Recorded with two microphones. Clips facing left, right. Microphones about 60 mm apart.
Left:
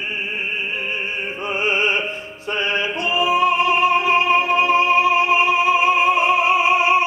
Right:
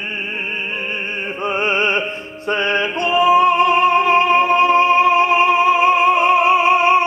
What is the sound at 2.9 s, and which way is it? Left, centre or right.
Yodeling, right.